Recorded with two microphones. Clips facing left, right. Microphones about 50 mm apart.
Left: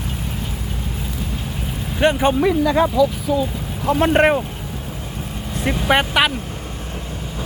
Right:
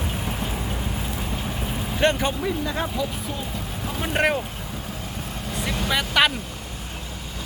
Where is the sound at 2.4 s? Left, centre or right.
Left.